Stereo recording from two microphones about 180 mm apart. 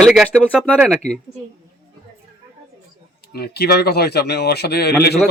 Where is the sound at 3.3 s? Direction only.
60° left (ahead or behind).